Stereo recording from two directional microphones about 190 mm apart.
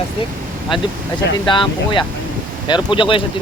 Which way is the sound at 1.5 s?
25° left (ahead or behind).